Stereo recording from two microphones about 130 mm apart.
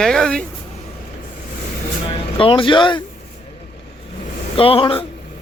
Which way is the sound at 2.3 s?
45° left (ahead or behind).